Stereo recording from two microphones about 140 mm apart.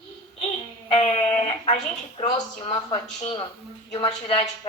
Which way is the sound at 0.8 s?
45° left (ahead or behind).